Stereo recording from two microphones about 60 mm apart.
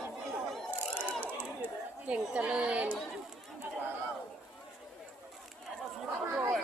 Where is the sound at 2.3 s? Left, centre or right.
Centre.